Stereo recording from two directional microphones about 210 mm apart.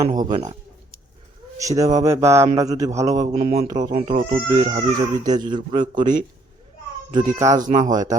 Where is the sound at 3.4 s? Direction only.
35° right (ahead or behind).